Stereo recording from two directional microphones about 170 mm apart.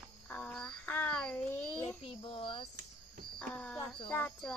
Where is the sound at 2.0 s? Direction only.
30° left (ahead or behind).